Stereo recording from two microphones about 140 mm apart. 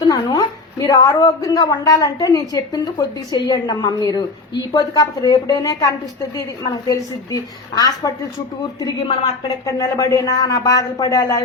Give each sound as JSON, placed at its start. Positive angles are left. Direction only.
{"t": 0.0, "sound": "a woman's voice", "side_deg": 30}